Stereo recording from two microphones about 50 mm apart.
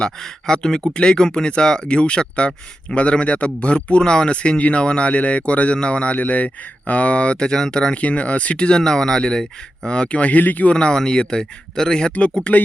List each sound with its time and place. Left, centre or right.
0.0 s a man's voice: centre
8.0 s speech: left
12.5 s a man's voice: left